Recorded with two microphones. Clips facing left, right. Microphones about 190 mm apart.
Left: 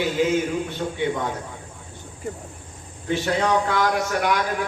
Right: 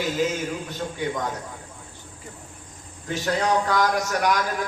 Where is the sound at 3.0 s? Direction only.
40° right (ahead or behind).